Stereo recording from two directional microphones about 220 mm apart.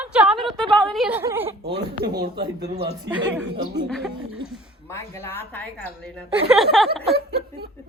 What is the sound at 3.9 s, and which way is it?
Speech, centre (ahead or behind).